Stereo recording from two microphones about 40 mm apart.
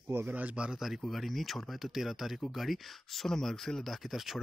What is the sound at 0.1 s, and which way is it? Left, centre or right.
Speech, right.